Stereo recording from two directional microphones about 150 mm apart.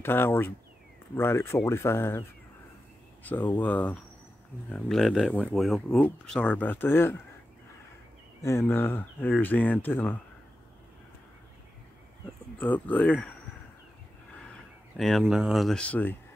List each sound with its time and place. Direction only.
0.0 s speech: 15° left (ahead or behind)
3.5 s speech: 10° left (ahead or behind)
8.4 s speech: 20° left (ahead or behind)
12.5 s speech: 10° left (ahead or behind)
15.0 s speech: centre (ahead or behind)